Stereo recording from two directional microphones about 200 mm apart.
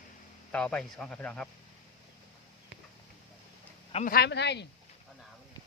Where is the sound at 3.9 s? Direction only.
45° left (ahead or behind).